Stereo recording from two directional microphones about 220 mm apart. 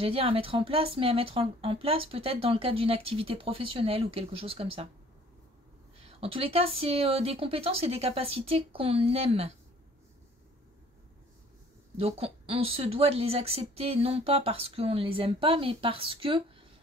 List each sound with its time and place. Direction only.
0.0 s speech: 25° right (ahead or behind)
6.0 s speech: 25° right (ahead or behind)
12.0 s speech: 25° right (ahead or behind)